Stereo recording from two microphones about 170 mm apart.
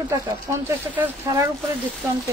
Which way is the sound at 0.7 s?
15° right (ahead or behind).